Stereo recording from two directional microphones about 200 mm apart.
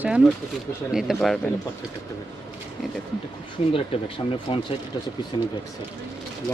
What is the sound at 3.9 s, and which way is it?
Speech, 30° left (ahead or behind).